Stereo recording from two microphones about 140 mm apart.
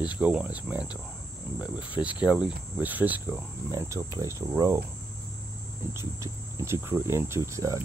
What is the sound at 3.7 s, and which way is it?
Speech, 20° right (ahead or behind).